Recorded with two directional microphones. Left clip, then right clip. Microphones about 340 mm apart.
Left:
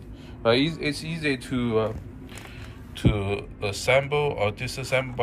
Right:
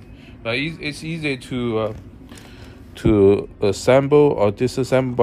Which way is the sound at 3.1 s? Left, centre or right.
Right.